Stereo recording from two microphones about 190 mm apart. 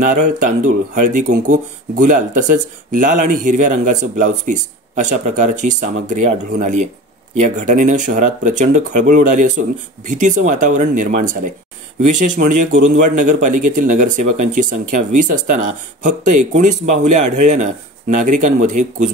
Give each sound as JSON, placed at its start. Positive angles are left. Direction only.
{"t": 0.0, "sound": "speech", "side_deg": -40}